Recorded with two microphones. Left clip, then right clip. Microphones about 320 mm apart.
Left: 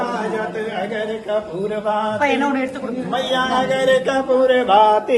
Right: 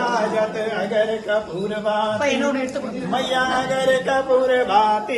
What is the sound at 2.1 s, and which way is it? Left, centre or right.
Speech, centre.